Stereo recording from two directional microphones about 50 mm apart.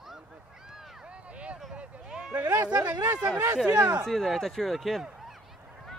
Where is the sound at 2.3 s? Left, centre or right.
Right.